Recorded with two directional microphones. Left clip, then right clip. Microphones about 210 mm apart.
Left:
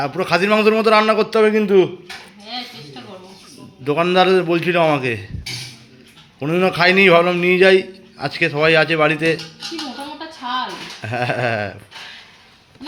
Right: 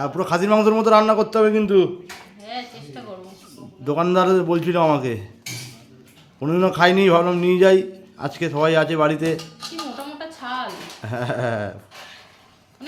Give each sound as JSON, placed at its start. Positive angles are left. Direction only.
{"t": 0.0, "sound": "a man's voice", "side_deg": -10}
{"t": 3.8, "sound": "a man's voice", "side_deg": -10}
{"t": 6.4, "sound": "a man's voice", "side_deg": -10}
{"t": 11.0, "sound": "speech", "side_deg": -5}